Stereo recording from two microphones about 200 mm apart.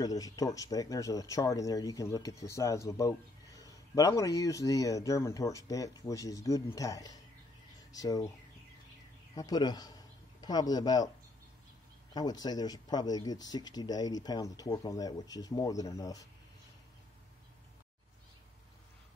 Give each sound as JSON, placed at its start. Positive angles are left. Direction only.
{"t": 0.0, "sound": "speech", "side_deg": 15}
{"t": 9.3, "sound": "a man's voice", "side_deg": 20}
{"t": 12.1, "sound": "speech", "side_deg": 20}